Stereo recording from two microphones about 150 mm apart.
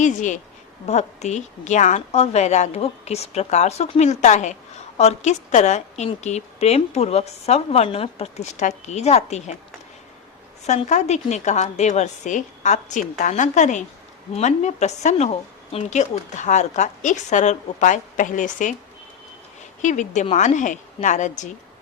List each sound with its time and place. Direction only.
0.0 s a woman's voice: 55° left (ahead or behind)
10.7 s a woman's voice: 50° left (ahead or behind)
19.8 s a woman's voice: 55° left (ahead or behind)